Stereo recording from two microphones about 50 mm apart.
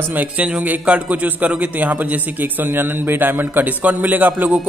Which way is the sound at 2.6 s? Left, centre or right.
Right.